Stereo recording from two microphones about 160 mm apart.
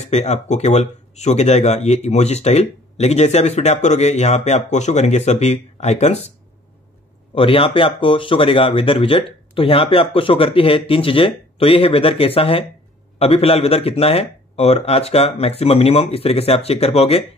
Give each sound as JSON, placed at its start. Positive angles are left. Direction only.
{"t": 0.0, "sound": "speech", "side_deg": 45}
{"t": 7.3, "sound": "speech", "side_deg": 35}